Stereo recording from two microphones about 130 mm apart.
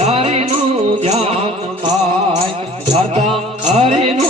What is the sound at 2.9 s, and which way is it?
Music, 55° right (ahead or behind).